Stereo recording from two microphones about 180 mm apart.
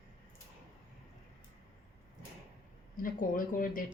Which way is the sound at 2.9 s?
50° left (ahead or behind).